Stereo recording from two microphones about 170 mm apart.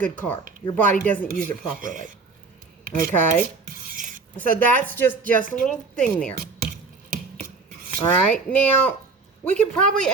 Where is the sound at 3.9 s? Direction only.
50° right (ahead or behind).